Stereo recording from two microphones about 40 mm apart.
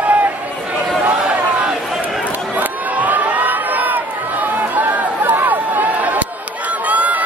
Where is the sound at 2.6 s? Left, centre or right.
Right.